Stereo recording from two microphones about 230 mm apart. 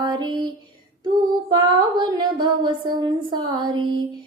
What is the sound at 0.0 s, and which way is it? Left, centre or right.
Music, centre.